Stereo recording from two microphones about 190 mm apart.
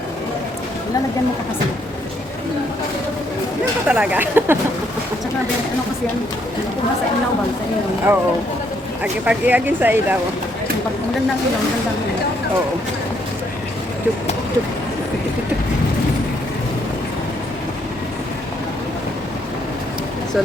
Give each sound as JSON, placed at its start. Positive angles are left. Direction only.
{"t": 3.8, "sound": "speech", "side_deg": -5}
{"t": 8.1, "sound": "speech", "side_deg": -10}
{"t": 9.2, "sound": "speech", "side_deg": -10}